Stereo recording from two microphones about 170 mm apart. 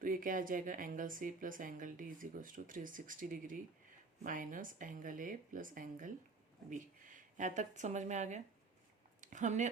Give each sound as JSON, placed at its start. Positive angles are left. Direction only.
{"t": 0.0, "sound": "speech", "side_deg": -55}